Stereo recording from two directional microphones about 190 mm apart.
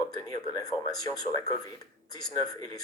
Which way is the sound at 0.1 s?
20° left (ahead or behind).